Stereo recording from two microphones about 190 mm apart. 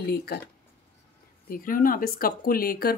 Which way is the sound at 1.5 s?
45° left (ahead or behind).